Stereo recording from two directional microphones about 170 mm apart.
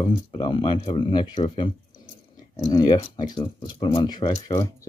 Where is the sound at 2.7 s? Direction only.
25° left (ahead or behind).